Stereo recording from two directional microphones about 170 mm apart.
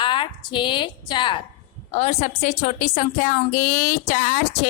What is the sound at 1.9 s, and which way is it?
A woman's voice, 40° left (ahead or behind).